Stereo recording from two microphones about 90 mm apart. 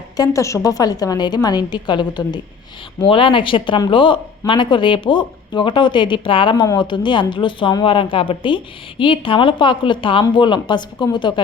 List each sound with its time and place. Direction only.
0.2 s a woman's voice: 35° left (ahead or behind); by 2.4 s 55° left (ahead or behind)
3.0 s a woman's voice: 75° left (ahead or behind); by 7.9 s 60° left (ahead or behind)
7.9 s a woman's voice: 75° left (ahead or behind); by 11.3 s 55° left (ahead or behind)